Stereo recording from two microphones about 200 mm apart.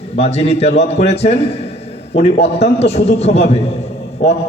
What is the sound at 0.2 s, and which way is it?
A man's voice, 30° left (ahead or behind).